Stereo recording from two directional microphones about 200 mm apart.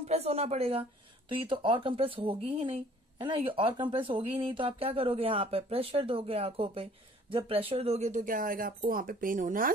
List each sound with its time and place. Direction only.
0.0 s speech: 30° right (ahead or behind)